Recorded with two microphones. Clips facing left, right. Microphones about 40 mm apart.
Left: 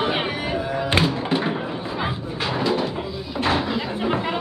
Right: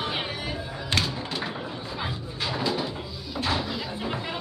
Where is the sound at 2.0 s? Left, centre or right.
Left.